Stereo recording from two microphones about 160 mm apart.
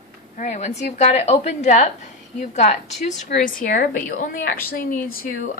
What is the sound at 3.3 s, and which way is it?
A woman's voice, 55° left (ahead or behind).